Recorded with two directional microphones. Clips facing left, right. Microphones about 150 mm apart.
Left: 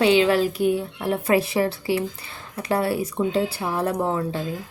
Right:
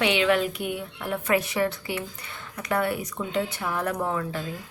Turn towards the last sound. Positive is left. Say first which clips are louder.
# left 4 dB
turn(degrees=30)  # may be behind; listen again after turning